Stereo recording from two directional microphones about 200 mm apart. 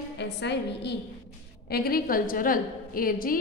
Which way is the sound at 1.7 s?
50° left (ahead or behind).